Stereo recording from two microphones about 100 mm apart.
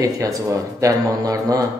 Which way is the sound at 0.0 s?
35° right (ahead or behind).